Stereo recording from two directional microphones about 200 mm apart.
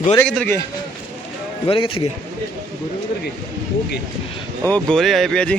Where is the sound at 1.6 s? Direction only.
25° left (ahead or behind).